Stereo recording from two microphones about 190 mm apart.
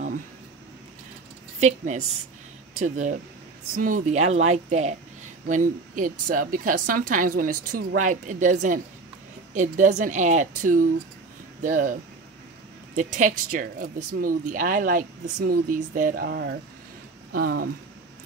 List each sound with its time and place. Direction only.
1.6 s a woman's voice: 35° right (ahead or behind); by 16.5 s 60° right (ahead or behind)
17.3 s speech: 50° right (ahead or behind)